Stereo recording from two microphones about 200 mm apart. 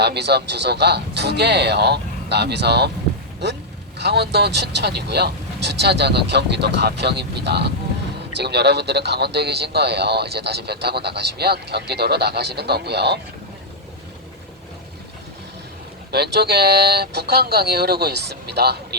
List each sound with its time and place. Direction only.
0.0 s a man's voice: 55° right (ahead or behind)
16.1 s speech: 55° right (ahead or behind)